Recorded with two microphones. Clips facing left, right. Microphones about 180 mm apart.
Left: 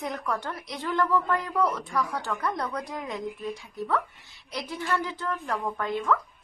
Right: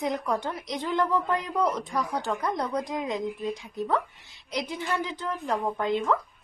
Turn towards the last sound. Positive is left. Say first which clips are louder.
# right 2 dB
turn(degrees=-20)  # may be behind; listen again after turning